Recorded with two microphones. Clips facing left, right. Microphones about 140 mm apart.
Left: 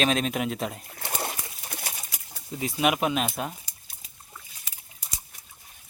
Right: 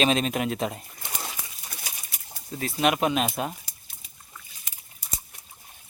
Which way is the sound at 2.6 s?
10° left (ahead or behind).